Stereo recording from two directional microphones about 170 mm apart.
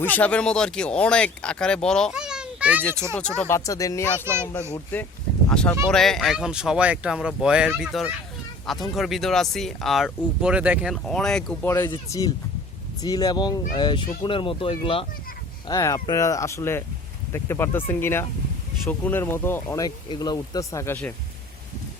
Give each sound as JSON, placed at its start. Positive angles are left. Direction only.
{"t": 0.0, "sound": "speech", "side_deg": 10}
{"t": 3.2, "sound": "speech", "side_deg": 5}
{"t": 11.7, "sound": "speech", "side_deg": 15}
{"t": 15.6, "sound": "speech", "side_deg": 20}